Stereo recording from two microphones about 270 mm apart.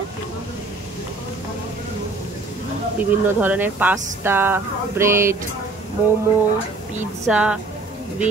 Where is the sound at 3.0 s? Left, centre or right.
Centre.